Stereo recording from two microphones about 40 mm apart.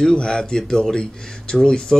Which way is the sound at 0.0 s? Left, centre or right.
Left.